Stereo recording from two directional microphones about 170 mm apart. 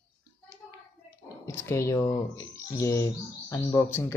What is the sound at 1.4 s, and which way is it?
Speech, 15° left (ahead or behind).